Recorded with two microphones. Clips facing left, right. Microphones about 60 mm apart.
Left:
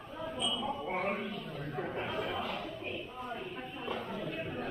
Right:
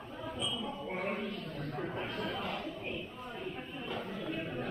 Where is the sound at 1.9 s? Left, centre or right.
Centre.